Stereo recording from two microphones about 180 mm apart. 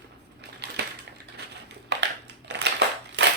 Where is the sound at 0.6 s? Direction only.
70° right (ahead or behind).